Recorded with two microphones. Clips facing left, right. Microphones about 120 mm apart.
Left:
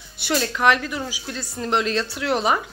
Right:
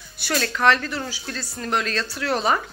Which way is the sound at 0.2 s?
20° left (ahead or behind).